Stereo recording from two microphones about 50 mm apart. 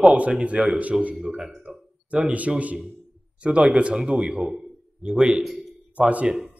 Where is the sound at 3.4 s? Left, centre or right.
Right.